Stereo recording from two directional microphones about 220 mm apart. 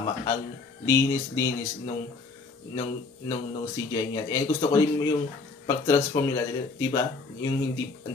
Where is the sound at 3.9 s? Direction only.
15° left (ahead or behind).